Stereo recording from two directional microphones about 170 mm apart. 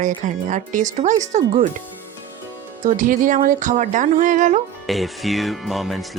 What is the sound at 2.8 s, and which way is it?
Speech, 50° right (ahead or behind).